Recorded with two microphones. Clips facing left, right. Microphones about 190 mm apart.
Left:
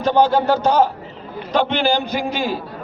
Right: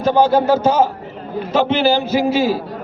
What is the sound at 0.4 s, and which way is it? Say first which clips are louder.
A man's voice: right 2 dB; 5° right (ahead or behind).